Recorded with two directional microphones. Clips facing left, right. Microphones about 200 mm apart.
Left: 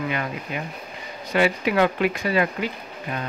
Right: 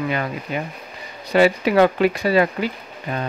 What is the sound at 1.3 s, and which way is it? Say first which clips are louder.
Speech: right 5 dB; 35° right (ahead or behind).